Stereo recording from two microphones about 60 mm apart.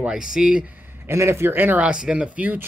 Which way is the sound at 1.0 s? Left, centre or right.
Right.